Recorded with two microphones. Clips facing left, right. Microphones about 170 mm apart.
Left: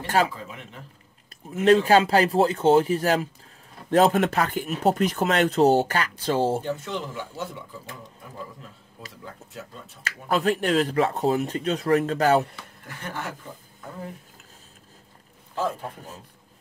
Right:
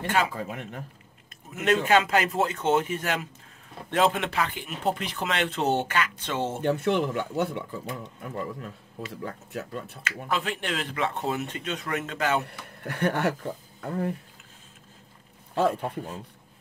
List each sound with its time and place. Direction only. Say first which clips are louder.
0.0 s speech: left 3 dB; 35° left (ahead or behind)
0.5 s a man's voice: right 5 dB; 55° right (ahead or behind)
1.5 s speech: left 5 dB; 35° left (ahead or behind)
6.6 s speech: right 6 dB; 65° right (ahead or behind)
9.2 s speech: right 4 dB; 65° right (ahead or behind)
10.0 s speech: left 7 dB; 40° left (ahead or behind)
12.4 s speech: right 5 dB; 65° right (ahead or behind)